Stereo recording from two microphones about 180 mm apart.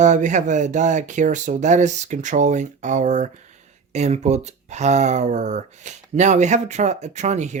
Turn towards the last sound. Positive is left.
turn(degrees=-40)  # may be behind; listen again after turning